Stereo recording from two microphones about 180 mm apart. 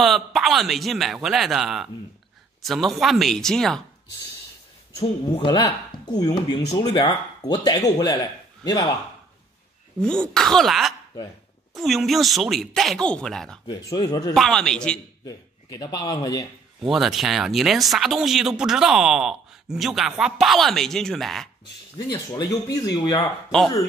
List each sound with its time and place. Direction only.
0.0 s speech: centre (ahead or behind)
5.0 s speech: 25° left (ahead or behind)
10.0 s speech: 5° left (ahead or behind)
13.7 s speech: 20° left (ahead or behind)
14.3 s speech: centre (ahead or behind)
15.2 s a man's voice: 20° left (ahead or behind)
16.8 s speech: centre (ahead or behind)
22.0 s speech: 20° left (ahead or behind)